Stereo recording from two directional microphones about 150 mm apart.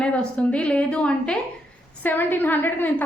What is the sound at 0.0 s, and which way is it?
A woman's voice, 5° left (ahead or behind).